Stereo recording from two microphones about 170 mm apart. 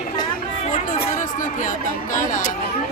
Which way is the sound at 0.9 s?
50° left (ahead or behind).